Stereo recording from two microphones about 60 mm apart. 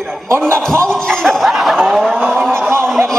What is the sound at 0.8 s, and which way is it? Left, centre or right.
Speech, centre.